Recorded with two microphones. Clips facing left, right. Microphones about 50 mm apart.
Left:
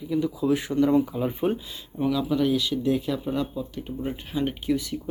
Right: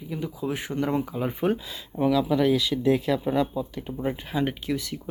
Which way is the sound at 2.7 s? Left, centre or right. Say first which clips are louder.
Even; right.